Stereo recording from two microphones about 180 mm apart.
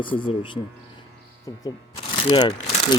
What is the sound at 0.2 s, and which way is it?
Speech, 25° left (ahead or behind).